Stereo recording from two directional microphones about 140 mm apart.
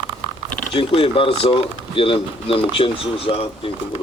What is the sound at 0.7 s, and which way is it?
Speech, 40° left (ahead or behind).